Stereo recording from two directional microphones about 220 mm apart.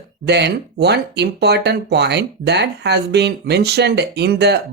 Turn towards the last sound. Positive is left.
turn(degrees=-50)  # may be behind; listen again after turning